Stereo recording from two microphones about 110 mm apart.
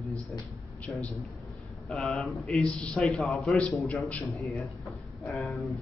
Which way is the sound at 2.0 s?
Centre (ahead or behind).